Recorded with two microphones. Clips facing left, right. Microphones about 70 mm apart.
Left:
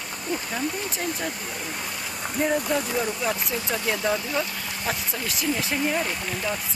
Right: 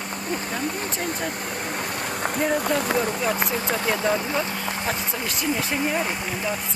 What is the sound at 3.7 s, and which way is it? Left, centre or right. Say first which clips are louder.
Speech: right 1 dB; right.